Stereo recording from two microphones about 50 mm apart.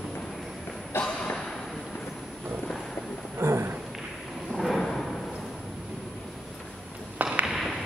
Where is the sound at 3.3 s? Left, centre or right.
Right.